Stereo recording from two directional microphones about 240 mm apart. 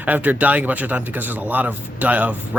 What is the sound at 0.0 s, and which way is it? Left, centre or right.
Speech, centre.